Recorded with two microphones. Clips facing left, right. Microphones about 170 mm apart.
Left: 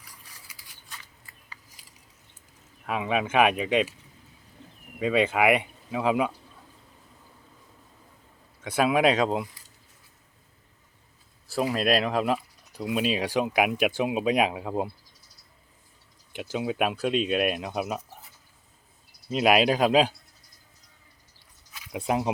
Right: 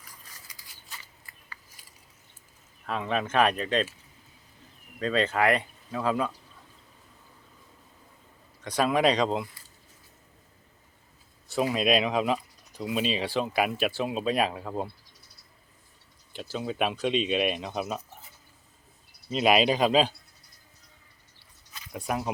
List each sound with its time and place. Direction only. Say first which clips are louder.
0.0 s a sound: even; 10° left (ahead or behind)
2.8 s speech: left 2 dB; 10° left (ahead or behind)
4.9 s speech: left 3 dB; 10° left (ahead or behind)
8.6 s speech: left 2 dB; 5° left (ahead or behind)
11.5 s speech: even; centre (ahead or behind); by 14.8 s 15° left (ahead or behind)
16.3 s speech: left 3 dB; 15° left (ahead or behind)
19.3 s speech: left 1 dB; 5° left (ahead or behind)
21.9 s speech: left 4 dB; 25° left (ahead or behind)